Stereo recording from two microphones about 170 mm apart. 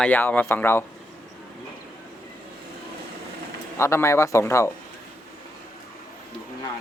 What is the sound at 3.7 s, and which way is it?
Speech, 15° left (ahead or behind).